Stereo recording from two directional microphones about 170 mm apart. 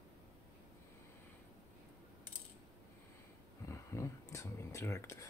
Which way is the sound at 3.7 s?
15° left (ahead or behind).